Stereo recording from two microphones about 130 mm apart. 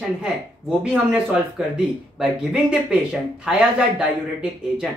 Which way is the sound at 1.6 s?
5° right (ahead or behind).